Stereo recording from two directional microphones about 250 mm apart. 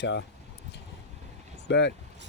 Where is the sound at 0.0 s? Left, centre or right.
Left.